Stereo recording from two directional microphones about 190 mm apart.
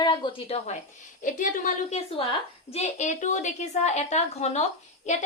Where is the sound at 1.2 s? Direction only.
45° left (ahead or behind).